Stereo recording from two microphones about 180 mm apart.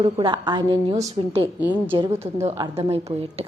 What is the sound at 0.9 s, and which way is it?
Speech, 35° right (ahead or behind).